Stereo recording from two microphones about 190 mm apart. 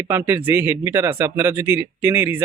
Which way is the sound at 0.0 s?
10° right (ahead or behind).